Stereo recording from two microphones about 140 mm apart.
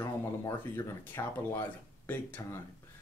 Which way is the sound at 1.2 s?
25° left (ahead or behind).